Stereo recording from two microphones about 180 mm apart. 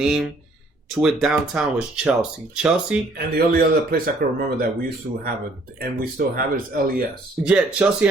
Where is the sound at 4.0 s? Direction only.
55° right (ahead or behind).